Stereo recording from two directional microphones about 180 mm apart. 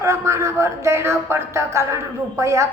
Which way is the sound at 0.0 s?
15° right (ahead or behind).